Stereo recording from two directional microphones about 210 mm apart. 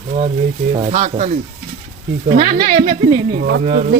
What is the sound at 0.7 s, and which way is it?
Speech, 30° right (ahead or behind).